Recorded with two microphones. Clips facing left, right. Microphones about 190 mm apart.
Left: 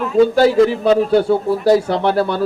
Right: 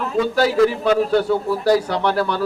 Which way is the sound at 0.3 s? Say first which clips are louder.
Left 4 dB; 25° left (ahead or behind).